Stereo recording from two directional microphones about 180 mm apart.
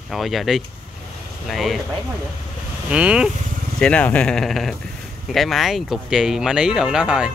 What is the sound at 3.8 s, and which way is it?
Speech, 5° left (ahead or behind).